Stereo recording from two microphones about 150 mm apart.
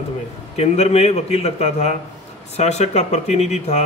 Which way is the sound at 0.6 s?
45° left (ahead or behind).